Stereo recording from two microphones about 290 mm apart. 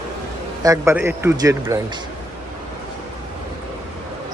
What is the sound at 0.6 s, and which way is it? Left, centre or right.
Speech, centre.